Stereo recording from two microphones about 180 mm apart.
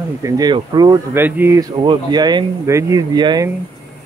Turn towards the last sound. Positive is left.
turn(degrees=-20)  # may be behind; listen again after turning